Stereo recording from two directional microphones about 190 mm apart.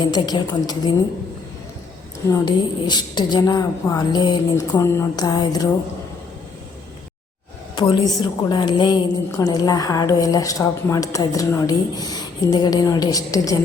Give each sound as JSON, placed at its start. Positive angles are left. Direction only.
{"t": 0.0, "sound": "a woman's voice", "side_deg": 25}
{"t": 2.3, "sound": "a woman's voice", "side_deg": 25}
{"t": 7.8, "sound": "a woman's voice", "side_deg": 25}